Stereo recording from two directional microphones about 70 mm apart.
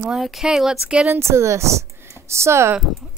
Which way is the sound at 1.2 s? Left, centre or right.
Right.